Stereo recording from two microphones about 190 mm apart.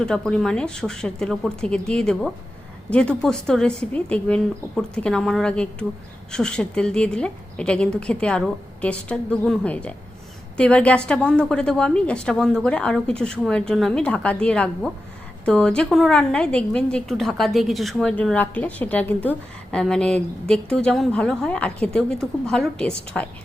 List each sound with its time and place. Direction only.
0.0 s a woman's voice: 5° left (ahead or behind)